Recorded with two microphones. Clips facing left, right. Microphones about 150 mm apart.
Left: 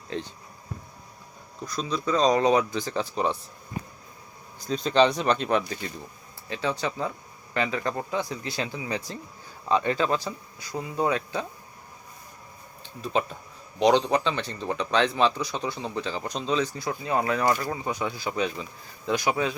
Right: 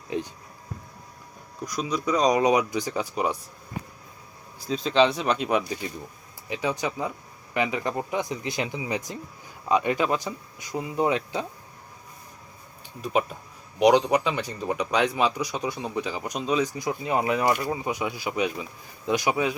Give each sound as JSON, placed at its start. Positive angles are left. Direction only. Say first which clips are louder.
{"t": 0.1, "sound": "speech", "louder": "right 3 dB", "side_deg": -15}
{"t": 1.6, "sound": "speech", "louder": "right 1 dB", "side_deg": -15}
{"t": 4.6, "sound": "speech", "louder": "even", "side_deg": 0}
{"t": 12.8, "sound": "speech", "louder": "right 2 dB", "side_deg": -10}